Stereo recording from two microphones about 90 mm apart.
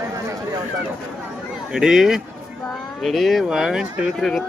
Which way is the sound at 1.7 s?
5° right (ahead or behind).